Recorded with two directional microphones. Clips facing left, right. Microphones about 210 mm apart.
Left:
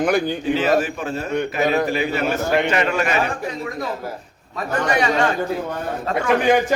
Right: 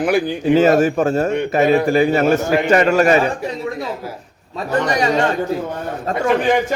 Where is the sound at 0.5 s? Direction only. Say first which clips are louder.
Right 7 dB; 45° right (ahead or behind).